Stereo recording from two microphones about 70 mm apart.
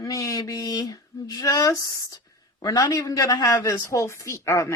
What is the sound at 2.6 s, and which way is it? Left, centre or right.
A woman's voice, left.